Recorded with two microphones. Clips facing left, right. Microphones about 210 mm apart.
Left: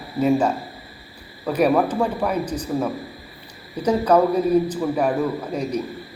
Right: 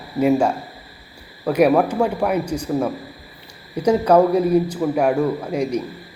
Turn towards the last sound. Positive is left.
turn(degrees=-10)  # may be behind; listen again after turning